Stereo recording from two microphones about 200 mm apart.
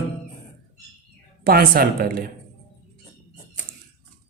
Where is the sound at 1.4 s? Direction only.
50° right (ahead or behind).